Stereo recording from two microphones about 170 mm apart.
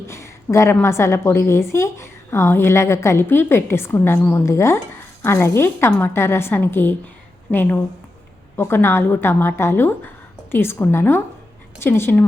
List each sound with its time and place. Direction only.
0.1 s a woman's voice: 15° left (ahead or behind)